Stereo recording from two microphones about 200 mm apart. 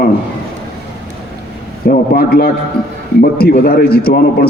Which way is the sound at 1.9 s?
50° left (ahead or behind).